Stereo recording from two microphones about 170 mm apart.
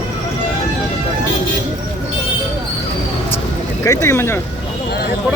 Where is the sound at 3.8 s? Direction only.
15° left (ahead or behind).